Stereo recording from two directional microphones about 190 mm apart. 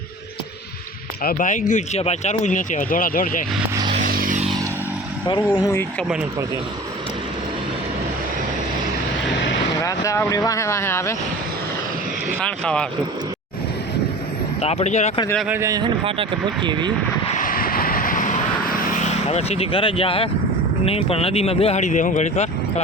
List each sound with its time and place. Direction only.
1.2 s speech: 45° left (ahead or behind)
3.8 s a sound: 25° right (ahead or behind)
4.0 s vehicle: 45° right (ahead or behind)
5.5 s speech: 10° left (ahead or behind)
9.8 s speech: 15° left (ahead or behind)
12.4 s speech: 5° left (ahead or behind)
14.6 s speech: 30° left (ahead or behind)
15.4 s speech: 15° right (ahead or behind)
17.2 s vehicle: 45° left (ahead or behind)
18.9 s speech: 35° left (ahead or behind)